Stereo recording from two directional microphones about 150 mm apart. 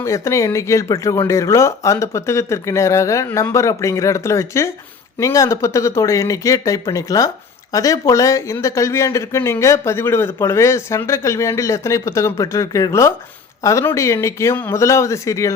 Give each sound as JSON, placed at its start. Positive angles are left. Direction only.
{"t": 0.0, "sound": "speech", "side_deg": 20}